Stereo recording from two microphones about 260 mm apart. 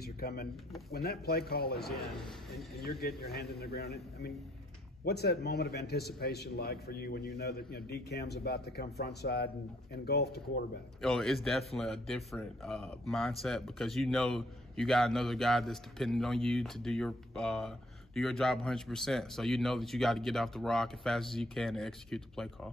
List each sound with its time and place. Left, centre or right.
0.0 s a sound: left
0.9 s a man's voice: left
11.0 s speech: centre